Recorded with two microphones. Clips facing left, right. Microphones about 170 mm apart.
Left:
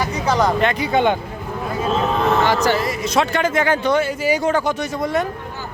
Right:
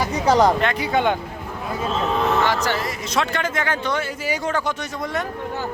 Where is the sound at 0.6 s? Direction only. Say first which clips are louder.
Left 3 dB; centre (ahead or behind).